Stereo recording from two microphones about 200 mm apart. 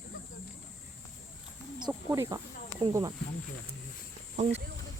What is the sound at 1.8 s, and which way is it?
Snake, 20° right (ahead or behind).